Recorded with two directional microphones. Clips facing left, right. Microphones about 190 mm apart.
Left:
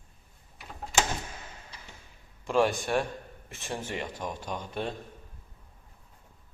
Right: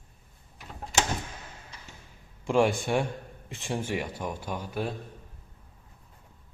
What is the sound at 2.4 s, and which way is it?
A man's voice, 15° right (ahead or behind).